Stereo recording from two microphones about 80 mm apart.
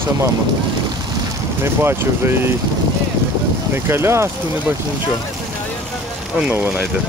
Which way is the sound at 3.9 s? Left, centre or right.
Right.